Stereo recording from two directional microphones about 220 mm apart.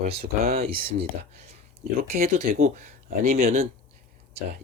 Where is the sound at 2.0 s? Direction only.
40° right (ahead or behind).